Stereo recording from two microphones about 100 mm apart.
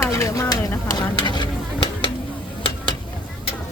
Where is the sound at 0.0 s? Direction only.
30° left (ahead or behind); by 1.9 s 50° left (ahead or behind).